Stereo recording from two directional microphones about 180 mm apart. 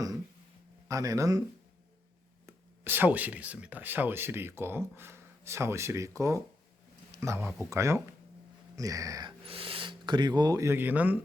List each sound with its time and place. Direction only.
0.9 s speech: 20° right (ahead or behind)
2.5 s speech: 10° right (ahead or behind)
9.4 s speech: 30° right (ahead or behind); by 11.2 s 10° right (ahead or behind)